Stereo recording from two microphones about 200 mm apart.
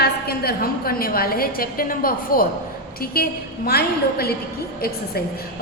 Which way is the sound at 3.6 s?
50° left (ahead or behind).